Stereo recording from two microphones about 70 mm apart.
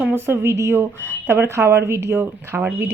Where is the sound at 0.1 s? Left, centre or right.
Right.